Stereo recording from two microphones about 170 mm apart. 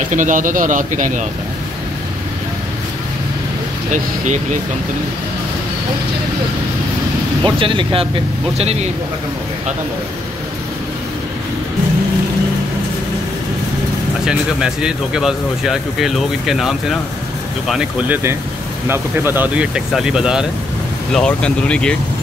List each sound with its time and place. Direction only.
0.1 s speech: 50° right (ahead or behind)
3.9 s speech: 45° right (ahead or behind)
7.4 s speech: 30° right (ahead or behind)
14.2 s speech: 5° right (ahead or behind)